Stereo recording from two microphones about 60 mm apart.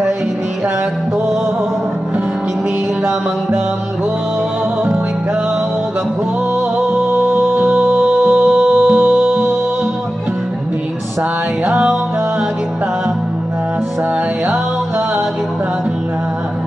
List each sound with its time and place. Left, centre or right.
7.3 s music: right
11.6 s music: right